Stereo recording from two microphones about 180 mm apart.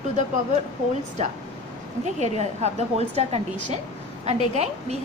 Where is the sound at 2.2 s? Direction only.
40° right (ahead or behind).